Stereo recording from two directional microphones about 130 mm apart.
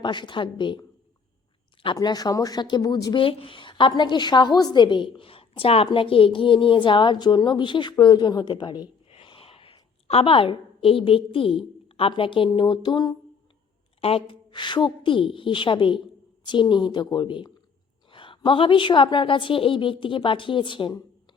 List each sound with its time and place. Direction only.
0.0 s speech: 35° left (ahead or behind)
9.0 s a woman's voice: 45° left (ahead or behind)
14.0 s speech: 45° left (ahead or behind)